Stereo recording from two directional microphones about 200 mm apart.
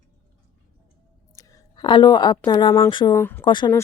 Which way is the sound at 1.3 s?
15° left (ahead or behind).